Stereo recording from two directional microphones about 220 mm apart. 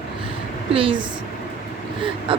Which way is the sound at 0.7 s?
25° right (ahead or behind).